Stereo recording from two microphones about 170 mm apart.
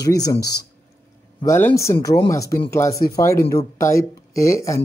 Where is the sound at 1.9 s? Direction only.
25° left (ahead or behind).